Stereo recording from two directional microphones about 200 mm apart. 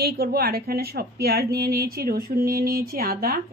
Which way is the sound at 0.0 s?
50° right (ahead or behind).